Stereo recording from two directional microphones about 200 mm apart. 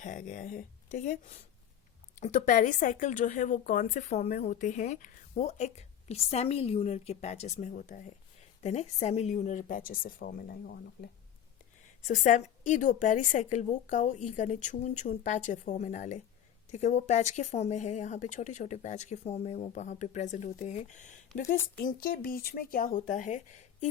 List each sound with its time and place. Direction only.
0.0 s speech: 40° left (ahead or behind)
12.0 s speech: 40° left (ahead or behind)